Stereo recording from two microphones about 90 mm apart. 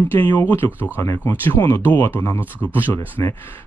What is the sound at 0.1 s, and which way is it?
Speech, 20° left (ahead or behind).